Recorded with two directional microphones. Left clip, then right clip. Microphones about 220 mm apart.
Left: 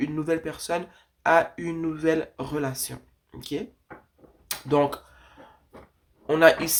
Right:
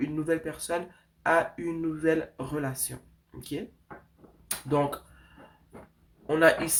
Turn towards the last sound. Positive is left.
turn(degrees=30)  # may be behind; listen again after turning